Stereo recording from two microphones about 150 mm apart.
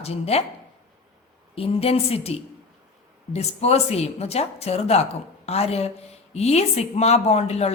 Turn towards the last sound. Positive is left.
turn(degrees=45)  # may be behind; listen again after turning